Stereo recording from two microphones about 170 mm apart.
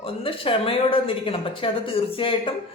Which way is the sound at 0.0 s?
30° left (ahead or behind).